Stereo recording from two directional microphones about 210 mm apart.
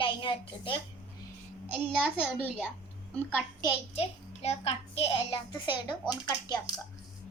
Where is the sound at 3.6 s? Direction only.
30° left (ahead or behind).